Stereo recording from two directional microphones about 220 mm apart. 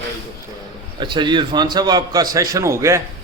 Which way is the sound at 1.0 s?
20° right (ahead or behind).